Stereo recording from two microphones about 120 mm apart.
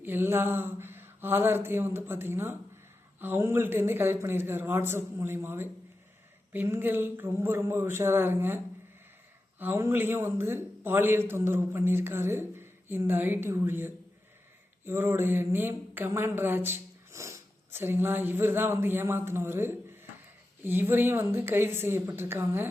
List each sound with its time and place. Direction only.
0.0 s a man's voice: 20° right (ahead or behind)